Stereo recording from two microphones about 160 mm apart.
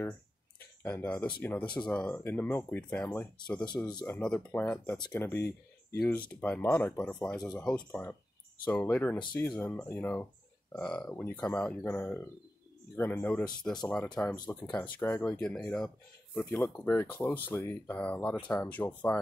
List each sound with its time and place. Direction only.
0.8 s speech: 10° left (ahead or behind)
3.6 s speech: 25° left (ahead or behind)
4.0 s speech: 10° left (ahead or behind)
7.4 s speech: 5° left (ahead or behind)